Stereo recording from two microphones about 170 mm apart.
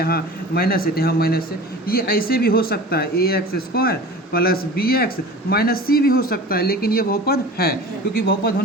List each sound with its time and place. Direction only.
0.0 s speech: 60° left (ahead or behind)